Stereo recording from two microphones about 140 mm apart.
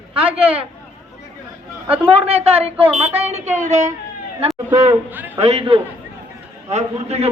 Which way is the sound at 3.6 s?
55° right (ahead or behind).